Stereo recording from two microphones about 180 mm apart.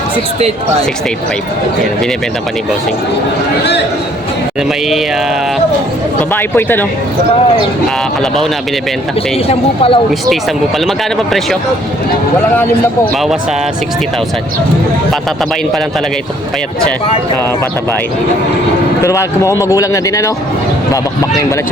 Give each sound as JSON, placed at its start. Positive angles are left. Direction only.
{"t": 6.3, "sound": "speech", "side_deg": 10}
{"t": 9.5, "sound": "a woman's voice", "side_deg": 30}
{"t": 19.0, "sound": "speech", "side_deg": 15}